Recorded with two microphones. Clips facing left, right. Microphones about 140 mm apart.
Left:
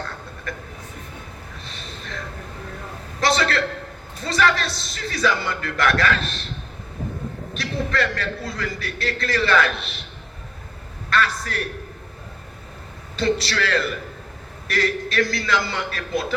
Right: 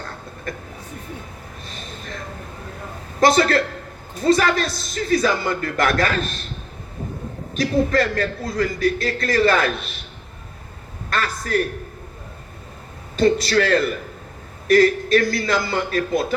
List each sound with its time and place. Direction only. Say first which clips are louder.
1.6 s a sound: right 3 dB; 45° right (ahead or behind)
3.2 s a man's voice: right 5 dB; 45° right (ahead or behind)
7.5 s a man's voice: right 7 dB; 40° right (ahead or behind)
11.1 s a man's voice: right 1 dB; 40° right (ahead or behind)
13.1 s a man's voice: right 6 dB; 45° right (ahead or behind)